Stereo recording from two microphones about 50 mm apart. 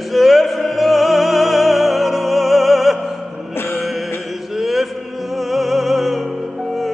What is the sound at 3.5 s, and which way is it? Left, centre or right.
Music, left.